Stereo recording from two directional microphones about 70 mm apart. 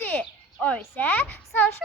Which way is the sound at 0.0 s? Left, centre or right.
Left.